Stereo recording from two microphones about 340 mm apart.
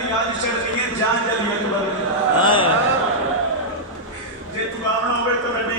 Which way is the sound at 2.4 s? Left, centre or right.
Centre.